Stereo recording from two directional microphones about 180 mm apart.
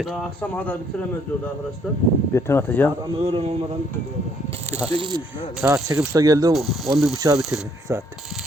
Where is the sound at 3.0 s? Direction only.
30° right (ahead or behind).